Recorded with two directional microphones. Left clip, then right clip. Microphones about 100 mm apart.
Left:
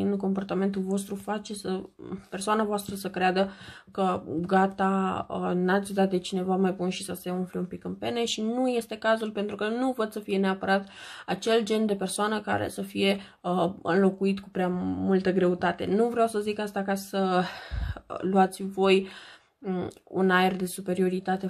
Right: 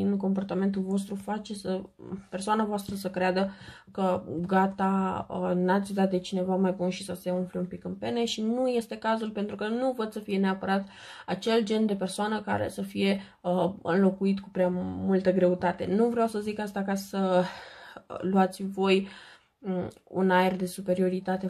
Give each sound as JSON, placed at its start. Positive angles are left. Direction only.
{"t": 0.0, "sound": "speech", "side_deg": 40}